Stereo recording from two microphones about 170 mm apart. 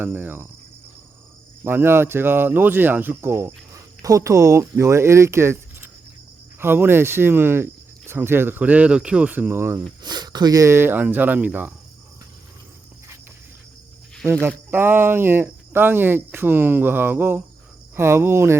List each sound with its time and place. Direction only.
0.0 s speech: 10° right (ahead or behind)
1.6 s speech: 15° right (ahead or behind)
6.6 s speech: 15° right (ahead or behind)
10.0 s speech: 25° right (ahead or behind); by 11.7 s 10° right (ahead or behind)
14.7 s speech: 10° right (ahead or behind)